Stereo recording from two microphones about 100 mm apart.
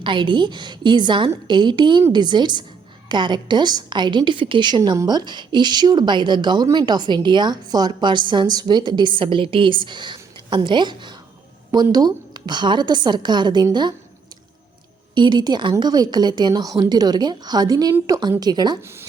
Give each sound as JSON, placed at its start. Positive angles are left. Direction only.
{"t": 0.0, "sound": "a woman's voice", "side_deg": -55}
{"t": 15.1, "sound": "a woman's voice", "side_deg": -50}
{"t": 18.8, "sound": "speech", "side_deg": -25}